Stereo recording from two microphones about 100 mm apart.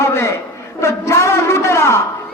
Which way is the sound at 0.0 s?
25° left (ahead or behind).